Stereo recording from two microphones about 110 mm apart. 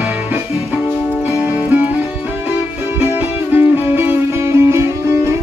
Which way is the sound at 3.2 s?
20° right (ahead or behind).